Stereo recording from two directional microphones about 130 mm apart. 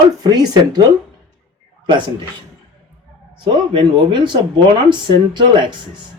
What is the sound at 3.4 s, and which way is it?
Speech, 35° right (ahead or behind).